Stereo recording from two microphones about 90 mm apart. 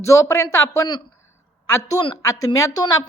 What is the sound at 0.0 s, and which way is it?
A woman's voice, 35° left (ahead or behind).